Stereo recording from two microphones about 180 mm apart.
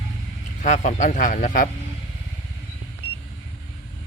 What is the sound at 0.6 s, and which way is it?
Speech, 45° left (ahead or behind).